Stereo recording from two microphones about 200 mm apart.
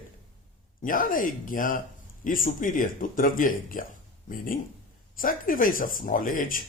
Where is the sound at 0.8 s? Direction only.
45° left (ahead or behind).